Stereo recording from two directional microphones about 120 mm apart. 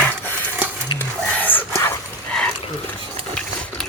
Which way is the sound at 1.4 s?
15° left (ahead or behind).